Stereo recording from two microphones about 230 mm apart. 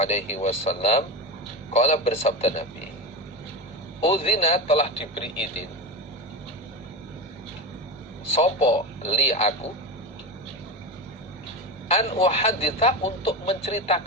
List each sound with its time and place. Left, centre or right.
0.0 s a man's voice: left
4.0 s a man's voice: left
8.4 s a man's voice: left
11.9 s a man's voice: left